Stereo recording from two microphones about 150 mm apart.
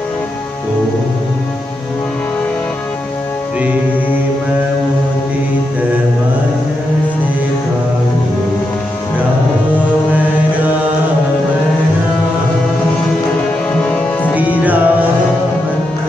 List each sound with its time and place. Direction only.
13.7 s music: 10° left (ahead or behind)
14.6 s music: 10° right (ahead or behind)